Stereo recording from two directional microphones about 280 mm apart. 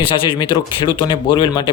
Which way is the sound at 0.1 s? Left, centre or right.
Centre.